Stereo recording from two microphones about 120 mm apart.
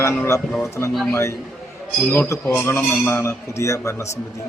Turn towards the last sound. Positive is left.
turn(degrees=25)  # may be behind; listen again after turning